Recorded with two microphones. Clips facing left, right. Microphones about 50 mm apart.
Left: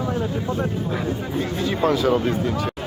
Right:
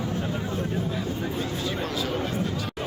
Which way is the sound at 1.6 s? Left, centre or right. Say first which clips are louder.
Left 8 dB; left.